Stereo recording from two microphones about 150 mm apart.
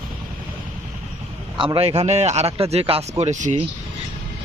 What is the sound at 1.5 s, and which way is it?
Speech, 35° right (ahead or behind).